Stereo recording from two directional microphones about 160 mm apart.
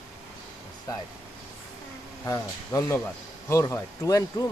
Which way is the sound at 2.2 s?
20° left (ahead or behind).